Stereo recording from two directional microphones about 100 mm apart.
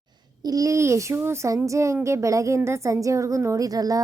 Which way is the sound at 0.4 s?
35° right (ahead or behind).